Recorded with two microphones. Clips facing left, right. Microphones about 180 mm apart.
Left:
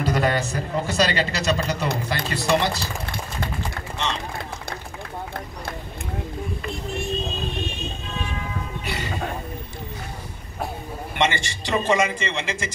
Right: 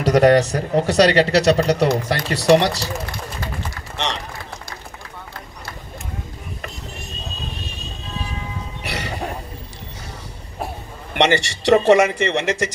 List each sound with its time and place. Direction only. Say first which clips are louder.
0.0 s a man's voice: right 9 dB; 80° right
8.8 s music: right 4 dB; 75° right (ahead or behind)
11.1 s a man's voice: right 6 dB; 70° right (ahead or behind)